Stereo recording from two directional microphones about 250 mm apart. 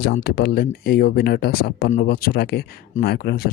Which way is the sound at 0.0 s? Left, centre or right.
Left.